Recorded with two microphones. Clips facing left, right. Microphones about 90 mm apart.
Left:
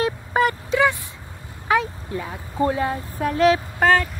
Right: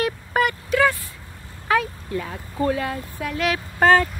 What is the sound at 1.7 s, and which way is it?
Speech, 20° left (ahead or behind).